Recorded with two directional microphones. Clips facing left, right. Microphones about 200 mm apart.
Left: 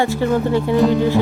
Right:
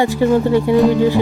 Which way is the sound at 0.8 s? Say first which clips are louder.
Right 1 dB; centre (ahead or behind).